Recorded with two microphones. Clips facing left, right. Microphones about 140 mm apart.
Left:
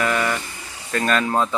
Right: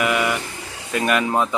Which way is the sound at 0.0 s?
10° right (ahead or behind).